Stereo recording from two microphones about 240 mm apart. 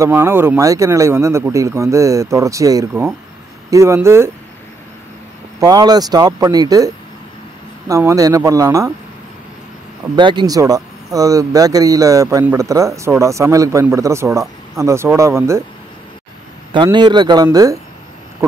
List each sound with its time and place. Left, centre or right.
0.0 s speech: centre
5.6 s speech: centre
7.9 s speech: centre
10.1 s speech: centre
16.7 s speech: centre